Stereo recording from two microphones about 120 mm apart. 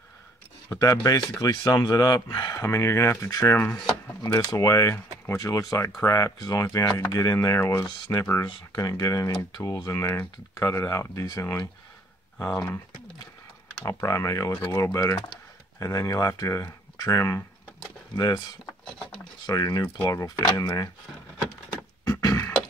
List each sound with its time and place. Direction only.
0.7 s speech: 25° left (ahead or behind)
2.6 s speech: 25° left (ahead or behind)
13.8 s speech: 25° left (ahead or behind)
19.4 s speech: 30° left (ahead or behind)
22.2 s a sound: 30° left (ahead or behind)